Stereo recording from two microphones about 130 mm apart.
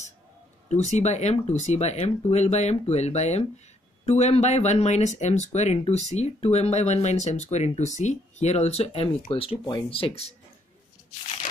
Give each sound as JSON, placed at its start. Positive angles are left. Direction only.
{"t": 0.7, "sound": "speech", "side_deg": 60}